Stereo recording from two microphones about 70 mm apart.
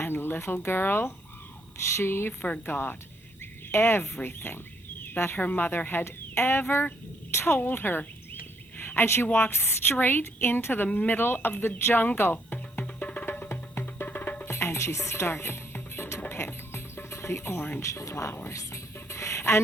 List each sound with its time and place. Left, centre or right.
0.0 s a woman's voice: left
8.8 s a sound: left
9.2 s a woman's voice: left
12.0 s music: left
14.5 s music: left
17.8 s a woman's voice: left
18.5 s music: left